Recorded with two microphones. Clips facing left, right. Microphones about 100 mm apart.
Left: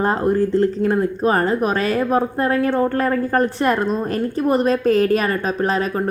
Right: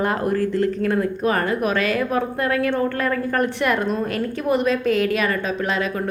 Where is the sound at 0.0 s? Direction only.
30° left (ahead or behind).